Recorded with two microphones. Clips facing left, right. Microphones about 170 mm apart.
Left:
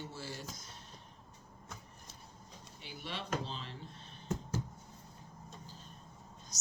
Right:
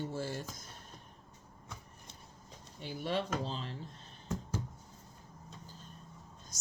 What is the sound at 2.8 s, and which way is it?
Speech, 45° right (ahead or behind).